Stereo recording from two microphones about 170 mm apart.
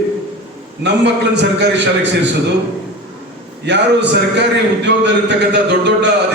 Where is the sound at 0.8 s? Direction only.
90° right.